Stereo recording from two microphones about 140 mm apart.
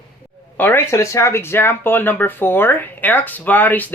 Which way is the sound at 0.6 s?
15° left (ahead or behind).